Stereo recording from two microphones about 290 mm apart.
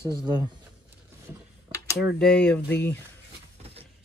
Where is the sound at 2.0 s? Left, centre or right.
Centre.